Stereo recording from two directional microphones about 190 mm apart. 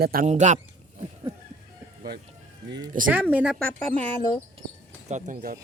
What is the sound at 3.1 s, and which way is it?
Speech, 10° right (ahead or behind).